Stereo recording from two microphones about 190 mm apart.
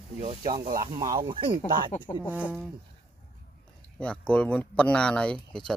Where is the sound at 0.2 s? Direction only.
30° right (ahead or behind).